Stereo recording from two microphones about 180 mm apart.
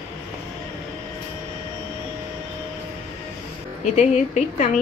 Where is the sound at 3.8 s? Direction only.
40° left (ahead or behind).